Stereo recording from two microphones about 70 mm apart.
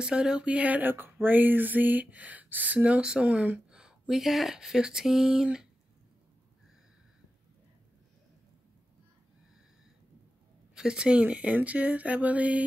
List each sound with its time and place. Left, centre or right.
0.0 s speech: centre
3.7 s speech: centre
10.7 s speech: centre